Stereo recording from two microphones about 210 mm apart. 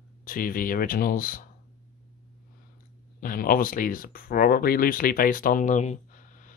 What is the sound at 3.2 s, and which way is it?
Speech, 45° left (ahead or behind).